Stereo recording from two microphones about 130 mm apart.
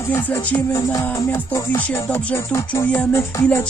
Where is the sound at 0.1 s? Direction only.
15° left (ahead or behind).